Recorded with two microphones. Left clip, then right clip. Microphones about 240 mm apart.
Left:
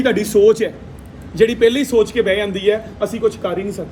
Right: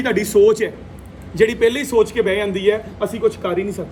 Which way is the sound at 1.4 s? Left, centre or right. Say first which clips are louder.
Left 2 dB; right.